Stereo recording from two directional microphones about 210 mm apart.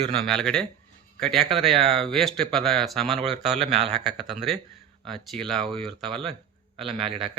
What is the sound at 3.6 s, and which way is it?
Speech, 30° right (ahead or behind).